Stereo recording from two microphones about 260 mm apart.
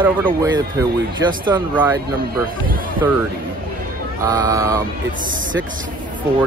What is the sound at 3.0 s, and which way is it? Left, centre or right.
Speech, centre.